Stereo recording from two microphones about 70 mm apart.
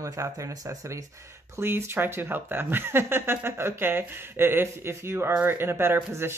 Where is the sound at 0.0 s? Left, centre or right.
Right.